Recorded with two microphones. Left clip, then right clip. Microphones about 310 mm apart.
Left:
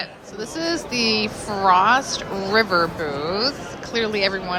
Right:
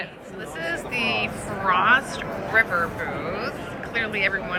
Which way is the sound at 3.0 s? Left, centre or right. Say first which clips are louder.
Left 5 dB; centre.